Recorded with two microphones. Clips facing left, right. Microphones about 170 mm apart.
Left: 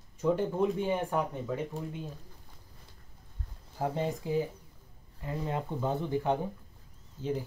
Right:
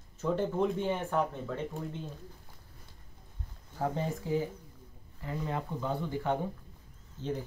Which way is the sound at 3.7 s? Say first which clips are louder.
Left 1 dB; 15° left (ahead or behind).